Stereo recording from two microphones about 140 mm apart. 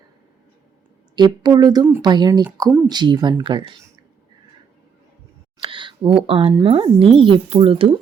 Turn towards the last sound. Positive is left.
turn(degrees=-40)  # may be behind; listen again after turning